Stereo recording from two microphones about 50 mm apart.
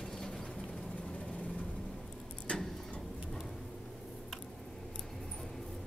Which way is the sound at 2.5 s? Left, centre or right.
Left.